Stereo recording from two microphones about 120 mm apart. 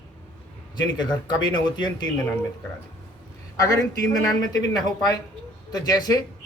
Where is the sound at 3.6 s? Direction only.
30° left (ahead or behind).